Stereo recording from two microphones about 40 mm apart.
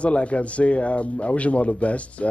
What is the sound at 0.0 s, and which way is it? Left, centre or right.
Speech, left.